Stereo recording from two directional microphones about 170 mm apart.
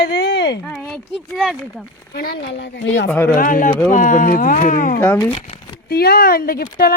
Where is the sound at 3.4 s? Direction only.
50° left (ahead or behind).